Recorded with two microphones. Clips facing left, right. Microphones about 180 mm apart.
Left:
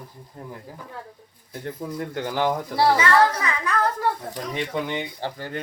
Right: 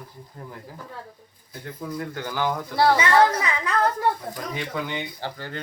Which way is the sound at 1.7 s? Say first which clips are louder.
Even; 25° left (ahead or behind).